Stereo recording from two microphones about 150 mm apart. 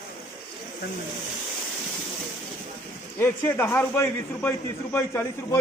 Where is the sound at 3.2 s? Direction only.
15° left (ahead or behind).